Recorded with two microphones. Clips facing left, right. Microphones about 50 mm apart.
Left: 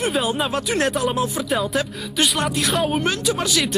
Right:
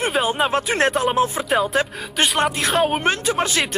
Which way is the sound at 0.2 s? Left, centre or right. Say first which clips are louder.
Right 3 dB; centre.